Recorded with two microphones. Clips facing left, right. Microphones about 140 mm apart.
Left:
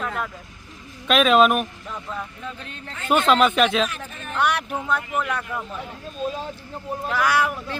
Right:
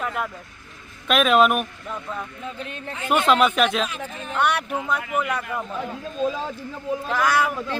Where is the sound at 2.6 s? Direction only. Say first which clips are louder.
Left 1 dB; 20° right (ahead or behind).